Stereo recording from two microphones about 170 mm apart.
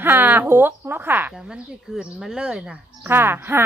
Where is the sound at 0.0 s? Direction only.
10° right (ahead or behind).